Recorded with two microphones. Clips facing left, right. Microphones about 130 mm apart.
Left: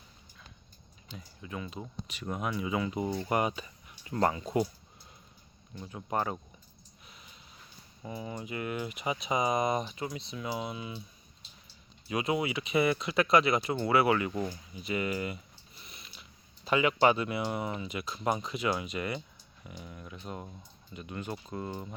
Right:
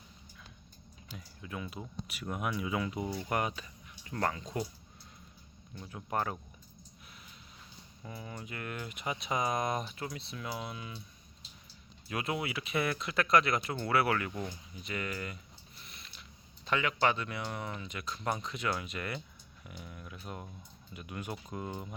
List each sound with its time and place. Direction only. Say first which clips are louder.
1.1 s speech: left 2 dB; centre (ahead or behind)
4.1 s speech: left 5 dB; 20° left (ahead or behind)
5.7 s speech: left 2 dB; 5° left (ahead or behind)
8.0 s speech: left 6 dB; 10° left (ahead or behind)
12.0 s speech: left 5 dB; centre (ahead or behind)
15.7 s mechanisms: left 2 dB; centre (ahead or behind)
16.6 s speech: left 5 dB; 15° left (ahead or behind); by 21.9 s 10° right (ahead or behind)